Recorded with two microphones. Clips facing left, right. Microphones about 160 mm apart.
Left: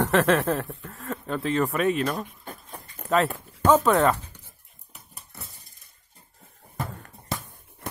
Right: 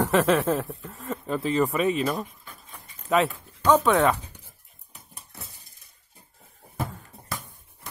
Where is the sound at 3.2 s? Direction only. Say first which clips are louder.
Left 1 dB; centre (ahead or behind).